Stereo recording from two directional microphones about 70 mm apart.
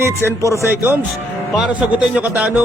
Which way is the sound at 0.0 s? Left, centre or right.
Right.